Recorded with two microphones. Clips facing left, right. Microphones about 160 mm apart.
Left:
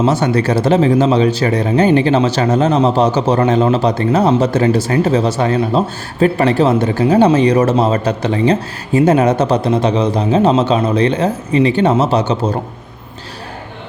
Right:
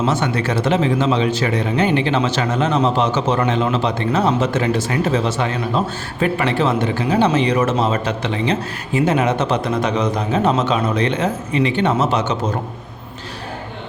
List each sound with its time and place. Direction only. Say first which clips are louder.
0.0 s speech: left 5 dB; 35° left (ahead or behind)